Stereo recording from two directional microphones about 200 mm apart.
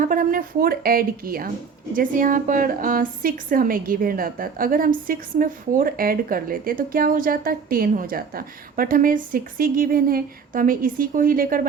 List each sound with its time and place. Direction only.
0.0 s a woman's voice: 45° right (ahead or behind)